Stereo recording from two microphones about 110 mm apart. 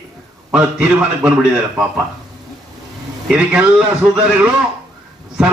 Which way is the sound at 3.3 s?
10° right (ahead or behind).